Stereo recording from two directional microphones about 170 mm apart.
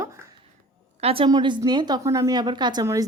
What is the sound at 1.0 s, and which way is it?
A woman's voice, 35° right (ahead or behind).